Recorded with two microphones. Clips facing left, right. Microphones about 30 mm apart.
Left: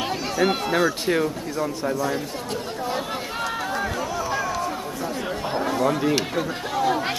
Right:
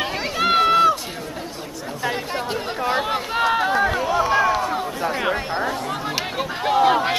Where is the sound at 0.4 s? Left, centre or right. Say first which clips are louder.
Right 6 dB; right.